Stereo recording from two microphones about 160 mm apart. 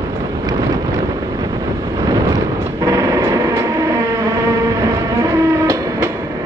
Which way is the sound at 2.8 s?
20° right (ahead or behind).